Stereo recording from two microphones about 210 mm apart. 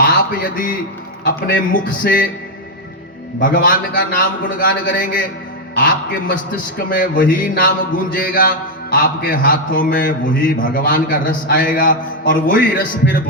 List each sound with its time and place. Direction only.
0.0 s a sound: 40° left (ahead or behind)
1.5 s a man's voice: 40° left (ahead or behind)
3.4 s a man's voice: 40° left (ahead or behind)